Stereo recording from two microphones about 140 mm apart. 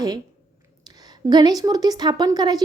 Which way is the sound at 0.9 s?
30° right (ahead or behind).